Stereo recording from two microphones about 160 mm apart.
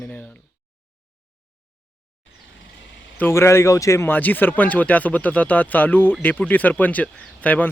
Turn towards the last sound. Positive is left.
turn(degrees=10)  # may be behind; listen again after turning